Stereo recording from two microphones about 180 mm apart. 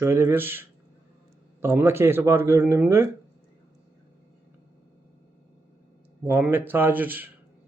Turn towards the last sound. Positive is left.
turn(degrees=-10)  # may be behind; listen again after turning